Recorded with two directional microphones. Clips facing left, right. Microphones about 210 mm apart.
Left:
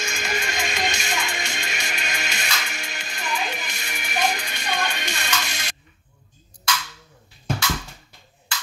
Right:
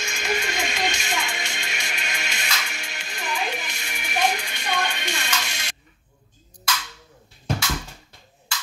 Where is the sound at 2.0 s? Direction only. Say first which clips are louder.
Left 2 dB; 45° left (ahead or behind).